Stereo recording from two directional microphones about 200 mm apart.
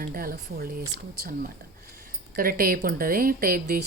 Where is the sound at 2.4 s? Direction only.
45° right (ahead or behind).